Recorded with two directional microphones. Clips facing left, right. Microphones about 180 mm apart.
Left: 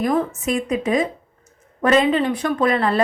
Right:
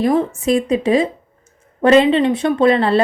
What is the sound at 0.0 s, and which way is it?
A woman's voice, 25° right (ahead or behind).